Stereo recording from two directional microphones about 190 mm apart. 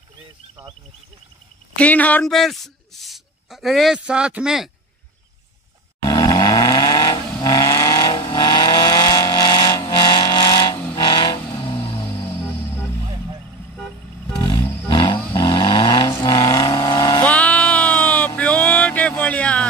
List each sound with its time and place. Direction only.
1.8 s a man's voice: 10° left (ahead or behind)
6.0 s vehicle: 20° left (ahead or behind)
12.3 s music: 10° left (ahead or behind)
14.9 s vehicle: 25° left (ahead or behind)
17.2 s music: 5° left (ahead or behind)